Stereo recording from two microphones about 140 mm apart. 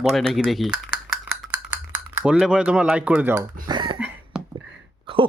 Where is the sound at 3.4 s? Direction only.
30° right (ahead or behind).